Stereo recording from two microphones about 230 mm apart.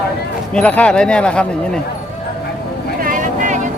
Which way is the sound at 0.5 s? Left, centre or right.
Centre.